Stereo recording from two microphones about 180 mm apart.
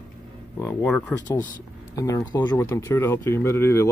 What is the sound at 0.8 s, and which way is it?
Speech, 5° left (ahead or behind).